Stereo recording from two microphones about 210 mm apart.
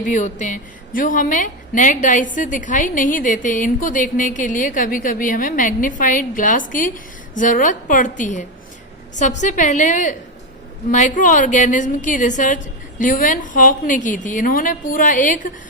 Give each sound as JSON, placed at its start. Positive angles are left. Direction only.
{"t": 0.0, "sound": "a woman's voice", "side_deg": 35}